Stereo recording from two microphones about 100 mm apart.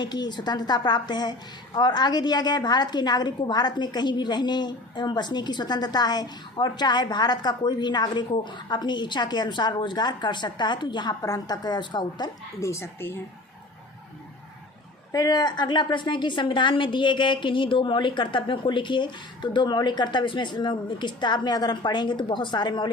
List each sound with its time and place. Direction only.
0.0 s a woman's voice: 45° left (ahead or behind)
11.2 s a woman's voice: 40° left (ahead or behind)
12.5 s speech: 30° left (ahead or behind)
15.1 s a woman's voice: 40° left (ahead or behind)